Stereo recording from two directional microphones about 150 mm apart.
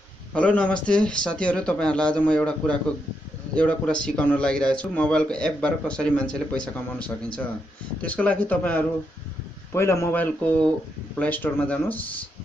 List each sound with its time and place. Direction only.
0.3 s speech: 10° left (ahead or behind)